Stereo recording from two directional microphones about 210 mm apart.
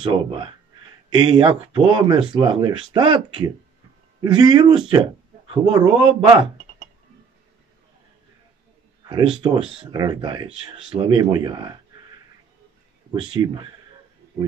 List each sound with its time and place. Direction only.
0.0 s speech: 25° right (ahead or behind)
9.1 s speech: 20° right (ahead or behind)
13.1 s speech: 25° right (ahead or behind)